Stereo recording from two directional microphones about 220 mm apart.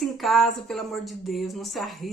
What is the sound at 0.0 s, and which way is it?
Speech, centre (ahead or behind).